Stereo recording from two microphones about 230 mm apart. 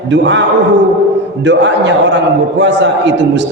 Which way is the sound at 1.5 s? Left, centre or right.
Right.